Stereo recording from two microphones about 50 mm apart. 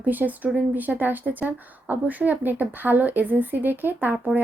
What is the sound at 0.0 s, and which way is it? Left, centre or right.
Speech, right.